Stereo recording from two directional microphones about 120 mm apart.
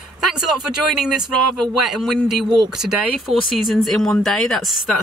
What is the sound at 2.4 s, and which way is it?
Speech, 40° right (ahead or behind).